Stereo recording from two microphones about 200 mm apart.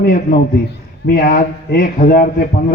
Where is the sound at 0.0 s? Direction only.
50° left (ahead or behind).